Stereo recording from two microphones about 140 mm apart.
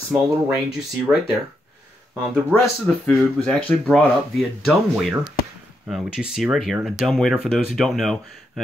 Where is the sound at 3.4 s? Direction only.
10° left (ahead or behind).